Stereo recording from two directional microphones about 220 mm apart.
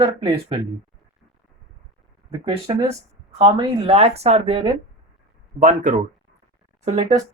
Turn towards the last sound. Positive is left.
turn(degrees=-30)  # may be behind; listen again after turning